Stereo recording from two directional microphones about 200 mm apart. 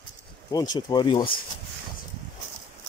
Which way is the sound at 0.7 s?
20° left (ahead or behind).